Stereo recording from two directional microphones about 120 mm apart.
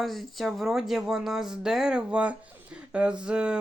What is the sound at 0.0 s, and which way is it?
A woman's voice, centre (ahead or behind).